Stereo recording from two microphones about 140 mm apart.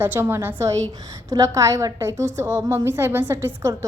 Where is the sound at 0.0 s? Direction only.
15° right (ahead or behind).